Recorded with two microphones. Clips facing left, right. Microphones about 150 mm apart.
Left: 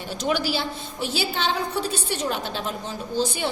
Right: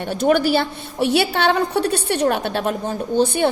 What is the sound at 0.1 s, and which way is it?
A woman's voice, 55° right (ahead or behind).